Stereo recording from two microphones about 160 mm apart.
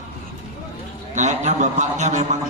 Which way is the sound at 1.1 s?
45° right (ahead or behind).